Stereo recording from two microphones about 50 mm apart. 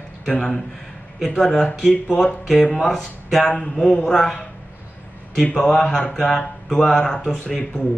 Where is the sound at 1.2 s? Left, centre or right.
Centre.